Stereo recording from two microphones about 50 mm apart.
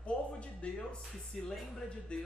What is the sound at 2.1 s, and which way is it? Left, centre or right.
Speech, left.